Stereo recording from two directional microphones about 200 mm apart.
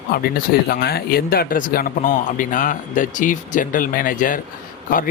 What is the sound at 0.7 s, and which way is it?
A man's voice, 50° left (ahead or behind).